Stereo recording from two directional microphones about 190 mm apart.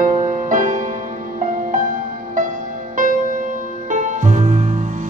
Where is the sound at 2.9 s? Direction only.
45° right (ahead or behind).